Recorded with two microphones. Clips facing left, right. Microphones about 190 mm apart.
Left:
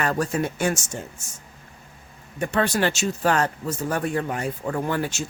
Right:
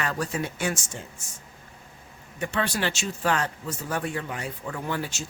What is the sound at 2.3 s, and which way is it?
Speech, 45° left (ahead or behind).